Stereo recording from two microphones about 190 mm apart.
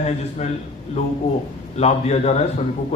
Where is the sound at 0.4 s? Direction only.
35° left (ahead or behind).